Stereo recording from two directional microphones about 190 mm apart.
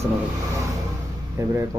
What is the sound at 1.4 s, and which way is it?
Speech, 15° right (ahead or behind).